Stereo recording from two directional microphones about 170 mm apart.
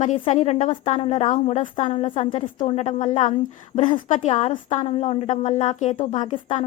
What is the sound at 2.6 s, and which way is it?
A woman's voice, 40° left (ahead or behind).